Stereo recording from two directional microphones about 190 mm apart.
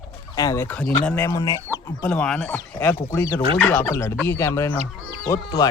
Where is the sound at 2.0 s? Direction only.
5° left (ahead or behind).